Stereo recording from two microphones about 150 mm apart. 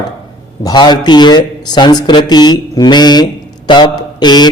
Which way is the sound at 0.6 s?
30° left (ahead or behind).